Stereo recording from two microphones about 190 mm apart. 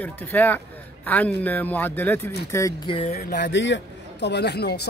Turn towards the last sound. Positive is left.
turn(degrees=60)  # may be behind; listen again after turning